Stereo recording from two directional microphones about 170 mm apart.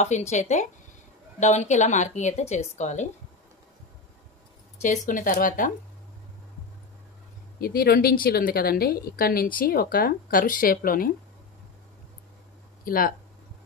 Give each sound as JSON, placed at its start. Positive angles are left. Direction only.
{"t": 0.0, "sound": "a woman's voice", "side_deg": 40}
{"t": 4.8, "sound": "a woman's voice", "side_deg": 50}
{"t": 7.6, "sound": "a woman's voice", "side_deg": 60}
{"t": 12.8, "sound": "speech", "side_deg": 55}